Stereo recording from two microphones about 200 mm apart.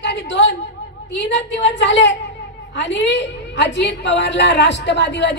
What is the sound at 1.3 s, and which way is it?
A woman's voice, 65° left (ahead or behind).